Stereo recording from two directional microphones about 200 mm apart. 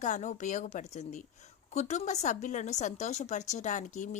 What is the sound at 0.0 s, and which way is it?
A woman's voice, 40° left (ahead or behind).